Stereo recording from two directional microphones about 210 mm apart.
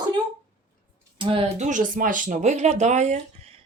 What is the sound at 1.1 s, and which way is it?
Speech, 25° right (ahead or behind).